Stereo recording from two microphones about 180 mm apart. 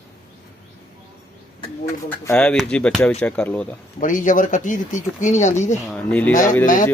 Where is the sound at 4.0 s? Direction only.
45° left (ahead or behind).